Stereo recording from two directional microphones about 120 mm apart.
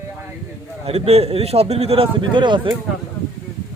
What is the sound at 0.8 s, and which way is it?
A man's voice, 55° right (ahead or behind).